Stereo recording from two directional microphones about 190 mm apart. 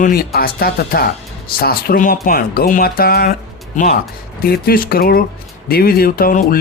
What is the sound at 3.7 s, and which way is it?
Speech, 40° left (ahead or behind).